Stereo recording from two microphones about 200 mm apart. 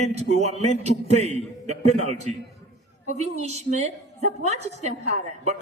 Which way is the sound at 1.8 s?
90° left.